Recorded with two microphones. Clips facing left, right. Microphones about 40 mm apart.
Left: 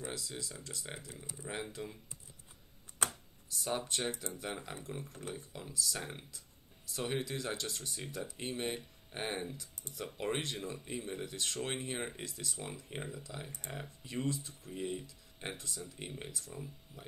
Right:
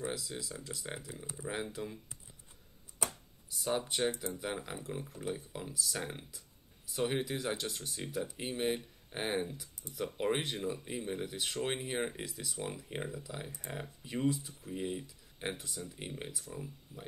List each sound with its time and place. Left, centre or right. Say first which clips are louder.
0.0 s speech: right 3 dB; centre
3.0 s typewriter: left 2 dB; left
3.5 s speech: right 3 dB; centre
9.8 s speech: right 2 dB; left
10.2 s speech: right 3 dB; centre